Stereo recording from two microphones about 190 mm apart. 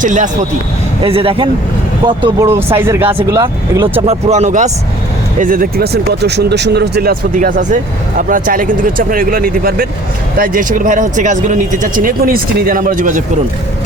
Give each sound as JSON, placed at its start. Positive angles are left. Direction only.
{"t": 0.0, "sound": "speech", "side_deg": -40}
{"t": 1.0, "sound": "speech", "side_deg": -30}
{"t": 2.5, "sound": "speech", "side_deg": -10}
{"t": 4.0, "sound": "speech", "side_deg": -35}